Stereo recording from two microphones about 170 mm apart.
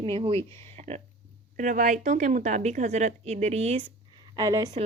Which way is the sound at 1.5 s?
50° right (ahead or behind).